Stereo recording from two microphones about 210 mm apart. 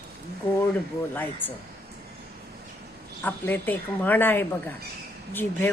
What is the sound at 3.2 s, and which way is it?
A woman's voice, 10° left (ahead or behind).